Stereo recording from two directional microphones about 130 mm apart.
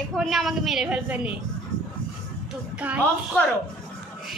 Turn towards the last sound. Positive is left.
turn(degrees=-10)  # may be behind; listen again after turning